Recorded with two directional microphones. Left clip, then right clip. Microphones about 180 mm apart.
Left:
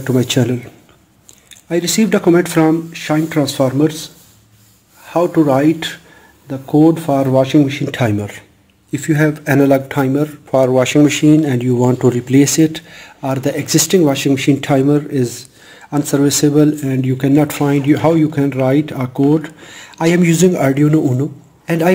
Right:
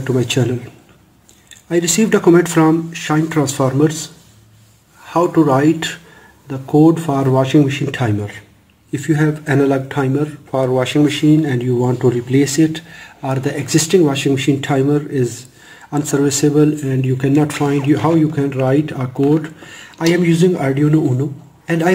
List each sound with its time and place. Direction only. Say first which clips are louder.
0.0 s speech: left 2 dB; 35° left (ahead or behind)
1.7 s speech: even; 25° left (ahead or behind)
5.0 s speech: even; 25° left (ahead or behind)
8.0 s speech: left 3 dB; 35° left (ahead or behind)